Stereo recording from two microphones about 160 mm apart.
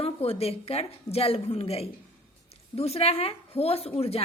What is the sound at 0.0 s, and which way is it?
A woman's voice, 40° left (ahead or behind).